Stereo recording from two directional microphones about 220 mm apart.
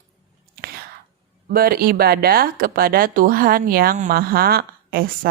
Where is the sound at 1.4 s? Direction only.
45° right (ahead or behind).